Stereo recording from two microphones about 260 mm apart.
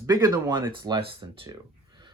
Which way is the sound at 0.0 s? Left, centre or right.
Centre.